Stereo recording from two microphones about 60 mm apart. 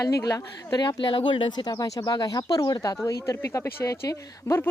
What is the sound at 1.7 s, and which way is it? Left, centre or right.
Speech, left.